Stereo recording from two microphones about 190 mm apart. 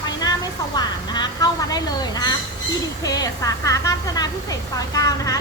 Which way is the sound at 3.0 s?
20° left (ahead or behind).